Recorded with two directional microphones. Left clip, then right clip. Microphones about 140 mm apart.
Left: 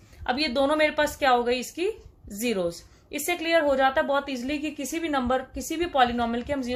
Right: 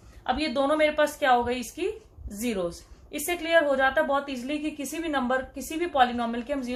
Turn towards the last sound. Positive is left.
turn(degrees=75)  # may be behind; listen again after turning